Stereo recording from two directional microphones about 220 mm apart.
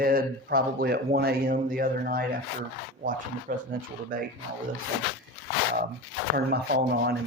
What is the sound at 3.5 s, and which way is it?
Speech, 40° right (ahead or behind).